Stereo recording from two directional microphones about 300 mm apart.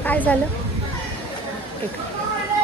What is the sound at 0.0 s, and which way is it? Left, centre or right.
Speech, centre.